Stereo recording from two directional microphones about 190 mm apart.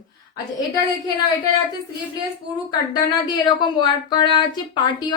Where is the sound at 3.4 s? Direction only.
25° left (ahead or behind).